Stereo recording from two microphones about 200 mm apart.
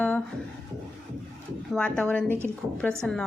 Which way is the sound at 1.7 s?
5° left (ahead or behind).